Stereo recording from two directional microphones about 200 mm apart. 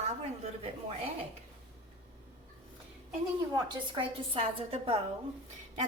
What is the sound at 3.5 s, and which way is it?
A woman's voice, 25° right (ahead or behind).